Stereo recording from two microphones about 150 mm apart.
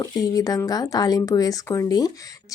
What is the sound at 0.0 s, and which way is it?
Speech, 25° left (ahead or behind).